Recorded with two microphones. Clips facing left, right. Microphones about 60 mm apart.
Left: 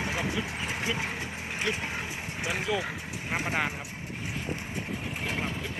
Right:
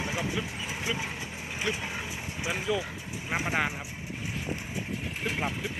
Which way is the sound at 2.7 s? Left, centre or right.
Centre.